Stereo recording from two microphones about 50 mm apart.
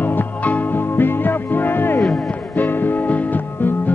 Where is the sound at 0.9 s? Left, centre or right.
Left.